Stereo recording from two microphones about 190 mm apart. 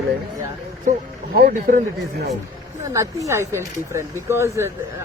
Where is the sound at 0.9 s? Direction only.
40° right (ahead or behind).